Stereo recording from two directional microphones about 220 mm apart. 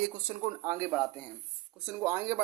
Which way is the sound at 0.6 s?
15° right (ahead or behind).